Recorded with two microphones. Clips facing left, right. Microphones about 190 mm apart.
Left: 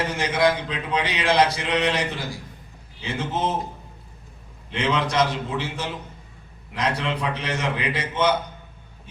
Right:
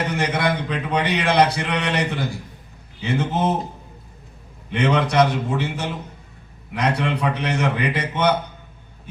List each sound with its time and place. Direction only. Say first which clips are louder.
0.1 s speech: left 1 dB; 60° right (ahead or behind)
4.7 s speech: right 4 dB; 60° right (ahead or behind)